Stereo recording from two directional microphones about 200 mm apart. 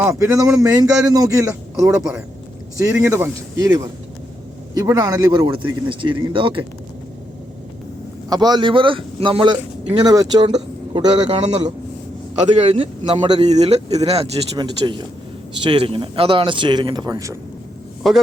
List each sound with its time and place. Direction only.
0.0 s a man's voice: 15° right (ahead or behind)
8.3 s a man's voice: 20° right (ahead or behind)
18.0 s a man's voice: centre (ahead or behind)